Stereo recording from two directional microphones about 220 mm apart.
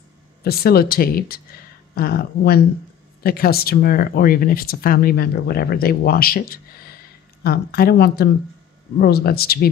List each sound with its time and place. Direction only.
0.4 s speech: 45° left (ahead or behind)